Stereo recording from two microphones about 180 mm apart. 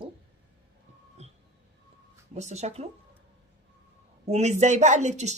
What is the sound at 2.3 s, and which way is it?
Speech, 40° right (ahead or behind).